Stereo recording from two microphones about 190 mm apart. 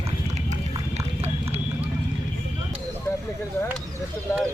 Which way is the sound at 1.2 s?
35° right (ahead or behind).